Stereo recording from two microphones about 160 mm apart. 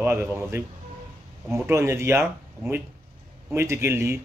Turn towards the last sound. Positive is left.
turn(degrees=-15)  # may be behind; listen again after turning